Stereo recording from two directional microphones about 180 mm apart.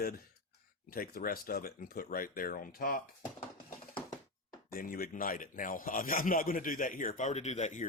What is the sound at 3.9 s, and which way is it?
Mechanisms, 25° left (ahead or behind).